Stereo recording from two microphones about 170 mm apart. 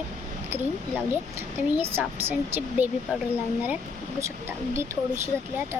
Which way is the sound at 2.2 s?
10° right (ahead or behind).